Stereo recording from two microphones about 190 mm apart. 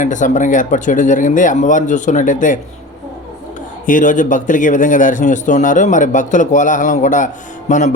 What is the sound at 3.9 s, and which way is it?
A man's voice, 40° left (ahead or behind).